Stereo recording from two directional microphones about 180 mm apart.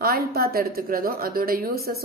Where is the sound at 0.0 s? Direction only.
60° right (ahead or behind).